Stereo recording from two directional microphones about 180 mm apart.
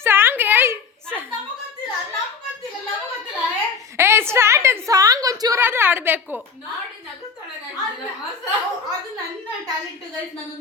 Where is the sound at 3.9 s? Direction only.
15° right (ahead or behind).